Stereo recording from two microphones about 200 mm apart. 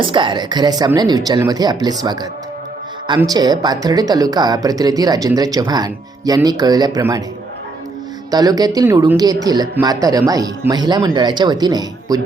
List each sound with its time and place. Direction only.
0.0 s speech: 25° right (ahead or behind)
3.2 s speech: 20° right (ahead or behind)
8.3 s speech: 20° right (ahead or behind)